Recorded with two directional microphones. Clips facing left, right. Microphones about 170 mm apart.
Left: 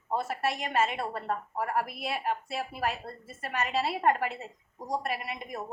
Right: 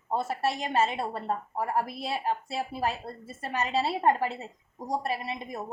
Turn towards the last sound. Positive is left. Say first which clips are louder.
# right 2 dB
turn(degrees=-25)  # may be behind; listen again after turning